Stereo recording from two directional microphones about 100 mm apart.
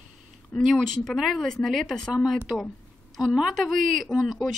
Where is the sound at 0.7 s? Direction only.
5° left (ahead or behind).